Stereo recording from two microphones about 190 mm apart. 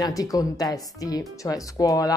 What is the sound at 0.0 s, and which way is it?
Speech, 20° left (ahead or behind).